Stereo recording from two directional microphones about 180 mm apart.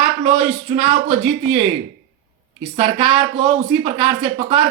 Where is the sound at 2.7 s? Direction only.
30° right (ahead or behind).